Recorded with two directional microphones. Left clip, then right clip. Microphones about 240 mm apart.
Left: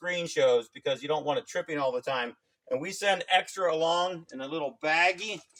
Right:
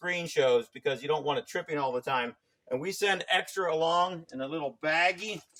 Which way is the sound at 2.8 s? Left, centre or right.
Right.